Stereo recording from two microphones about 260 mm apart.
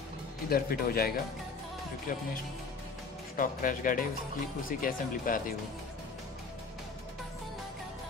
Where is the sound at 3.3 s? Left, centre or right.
Left.